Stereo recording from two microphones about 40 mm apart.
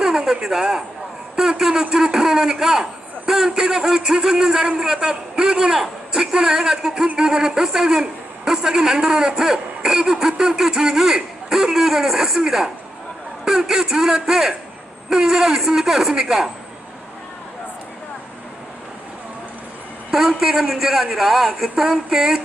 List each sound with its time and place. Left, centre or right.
0.0 s a sound: centre
1.4 s a man's voice: centre
20.1 s a man's voice: centre